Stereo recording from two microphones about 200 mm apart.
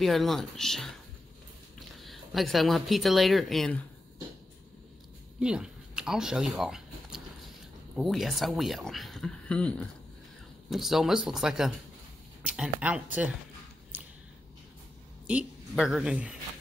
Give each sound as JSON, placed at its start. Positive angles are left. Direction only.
{"t": 0.0, "sound": "speech", "side_deg": 0}
{"t": 2.0, "sound": "speech", "side_deg": 0}
{"t": 5.4, "sound": "a sound", "side_deg": -5}
{"t": 7.9, "sound": "speech", "side_deg": 0}
{"t": 13.9, "sound": "a sound", "side_deg": -10}
{"t": 15.2, "sound": "speech", "side_deg": -5}